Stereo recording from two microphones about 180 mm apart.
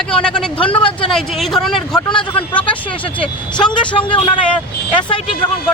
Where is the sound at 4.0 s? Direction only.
30° left (ahead or behind).